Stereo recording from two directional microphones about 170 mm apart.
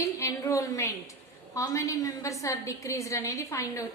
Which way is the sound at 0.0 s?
20° left (ahead or behind).